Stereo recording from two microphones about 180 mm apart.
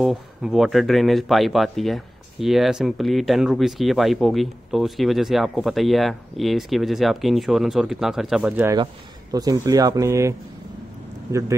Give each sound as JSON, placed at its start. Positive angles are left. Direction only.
{"t": 0.0, "sound": "speech", "side_deg": 0}
{"t": 9.3, "sound": "speech", "side_deg": -20}